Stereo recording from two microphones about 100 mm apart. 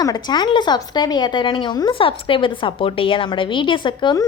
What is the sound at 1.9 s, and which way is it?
A woman's voice, 65° left (ahead or behind).